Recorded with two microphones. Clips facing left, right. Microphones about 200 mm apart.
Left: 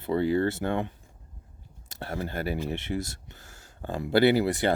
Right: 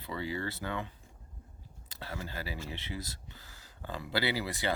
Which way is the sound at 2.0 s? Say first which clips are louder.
Left 9 dB; 55° left (ahead or behind).